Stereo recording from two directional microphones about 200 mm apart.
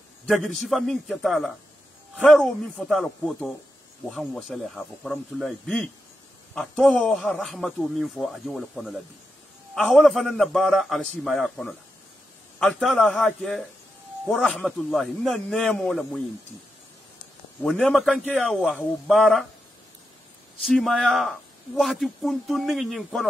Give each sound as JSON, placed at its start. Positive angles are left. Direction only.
{"t": 0.3, "sound": "speech", "side_deg": 0}
{"t": 17.6, "sound": "speech", "side_deg": 5}
{"t": 20.6, "sound": "speech", "side_deg": 0}